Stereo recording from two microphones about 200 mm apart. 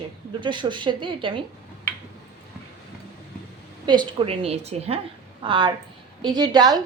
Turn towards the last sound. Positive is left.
turn(degrees=-20)  # may be behind; listen again after turning